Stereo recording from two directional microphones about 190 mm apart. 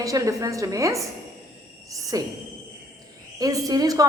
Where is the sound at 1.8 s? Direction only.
15° right (ahead or behind).